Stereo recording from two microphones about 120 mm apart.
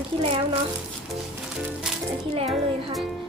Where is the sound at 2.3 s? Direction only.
55° right (ahead or behind).